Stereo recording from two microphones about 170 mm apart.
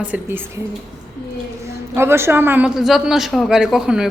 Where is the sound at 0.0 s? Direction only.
10° right (ahead or behind).